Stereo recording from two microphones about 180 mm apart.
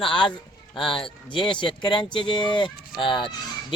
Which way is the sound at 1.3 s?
25° left (ahead or behind).